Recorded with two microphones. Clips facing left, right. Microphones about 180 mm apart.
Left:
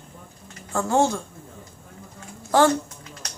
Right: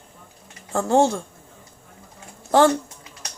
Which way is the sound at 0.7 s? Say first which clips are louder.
Right 3 dB; 30° right (ahead or behind).